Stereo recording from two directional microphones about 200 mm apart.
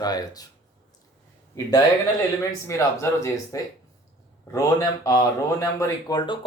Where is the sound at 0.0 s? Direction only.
20° left (ahead or behind).